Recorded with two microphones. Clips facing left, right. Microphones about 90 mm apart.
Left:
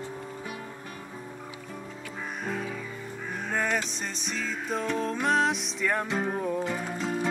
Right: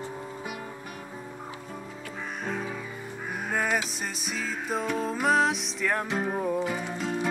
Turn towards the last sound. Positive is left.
turn(degrees=0)  # may be behind; listen again after turning